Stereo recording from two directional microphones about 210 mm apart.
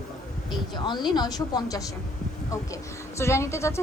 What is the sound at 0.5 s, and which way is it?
A woman's voice, 20° left (ahead or behind).